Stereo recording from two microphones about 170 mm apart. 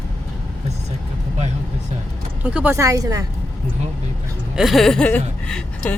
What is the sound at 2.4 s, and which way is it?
Speech, 10° right (ahead or behind).